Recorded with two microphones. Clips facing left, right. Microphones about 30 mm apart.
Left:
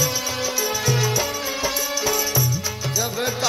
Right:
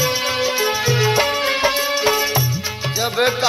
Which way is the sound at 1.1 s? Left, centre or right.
Right.